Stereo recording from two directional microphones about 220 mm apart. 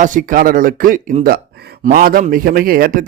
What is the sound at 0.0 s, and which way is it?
A man's voice, 35° right (ahead or behind).